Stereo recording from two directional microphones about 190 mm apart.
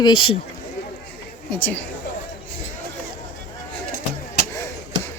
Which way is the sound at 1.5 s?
10° left (ahead or behind).